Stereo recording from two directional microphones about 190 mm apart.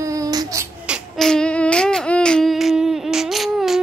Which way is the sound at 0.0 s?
20° right (ahead or behind).